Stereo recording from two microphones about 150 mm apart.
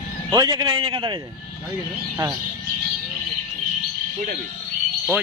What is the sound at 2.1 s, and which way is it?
Speech, 15° right (ahead or behind).